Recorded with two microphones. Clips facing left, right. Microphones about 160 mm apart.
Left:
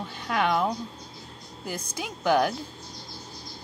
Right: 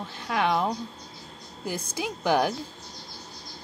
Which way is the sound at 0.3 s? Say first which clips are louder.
Even; centre (ahead or behind).